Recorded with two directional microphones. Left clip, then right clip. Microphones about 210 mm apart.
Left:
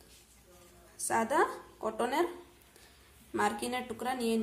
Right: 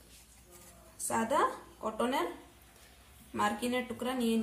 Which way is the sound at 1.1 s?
30° left (ahead or behind).